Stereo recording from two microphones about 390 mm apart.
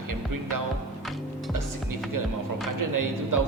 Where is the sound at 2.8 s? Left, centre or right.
Right.